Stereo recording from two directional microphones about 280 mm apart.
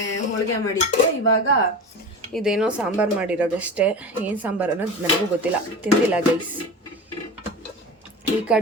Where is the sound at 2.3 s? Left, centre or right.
Centre.